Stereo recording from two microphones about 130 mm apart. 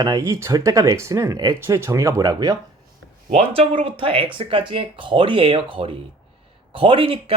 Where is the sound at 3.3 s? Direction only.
50° right (ahead or behind).